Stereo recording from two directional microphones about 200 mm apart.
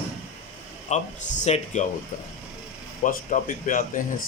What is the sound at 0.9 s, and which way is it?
Speech, 35° left (ahead or behind).